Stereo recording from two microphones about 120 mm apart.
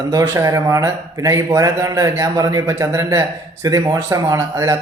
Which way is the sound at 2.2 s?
30° right (ahead or behind).